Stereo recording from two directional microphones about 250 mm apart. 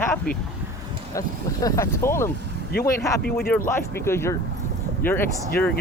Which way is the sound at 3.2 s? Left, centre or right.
Left.